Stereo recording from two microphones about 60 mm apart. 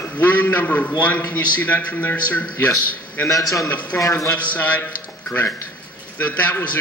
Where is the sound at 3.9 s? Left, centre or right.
Left.